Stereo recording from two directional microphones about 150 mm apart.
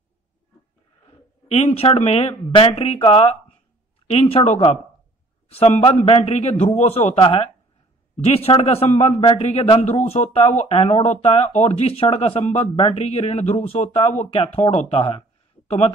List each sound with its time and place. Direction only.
1.5 s a man's voice: 45° left (ahead or behind)